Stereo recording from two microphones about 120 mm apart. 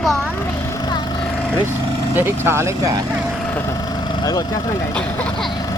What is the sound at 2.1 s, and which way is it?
Speech, 15° right (ahead or behind).